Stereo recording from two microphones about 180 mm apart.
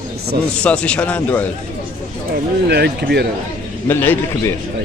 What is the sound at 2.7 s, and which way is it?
Speech, 65° right (ahead or behind).